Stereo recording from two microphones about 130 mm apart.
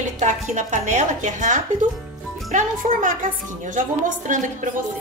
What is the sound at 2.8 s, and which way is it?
Speech, 55° right (ahead or behind).